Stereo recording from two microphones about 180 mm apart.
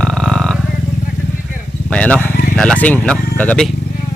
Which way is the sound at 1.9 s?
5° left (ahead or behind).